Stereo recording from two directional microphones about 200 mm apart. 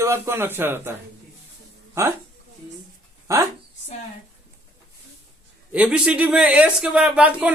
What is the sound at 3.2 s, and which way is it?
Speech, 15° right (ahead or behind).